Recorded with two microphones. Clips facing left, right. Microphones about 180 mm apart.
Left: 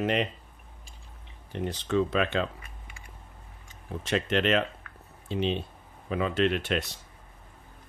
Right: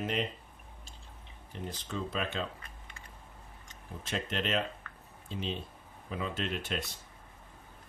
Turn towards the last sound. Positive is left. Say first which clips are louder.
# left 9 dB
turn(degrees=75)  # may be behind; listen again after turning